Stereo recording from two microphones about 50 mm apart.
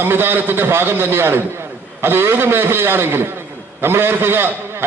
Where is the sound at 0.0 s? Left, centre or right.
Right.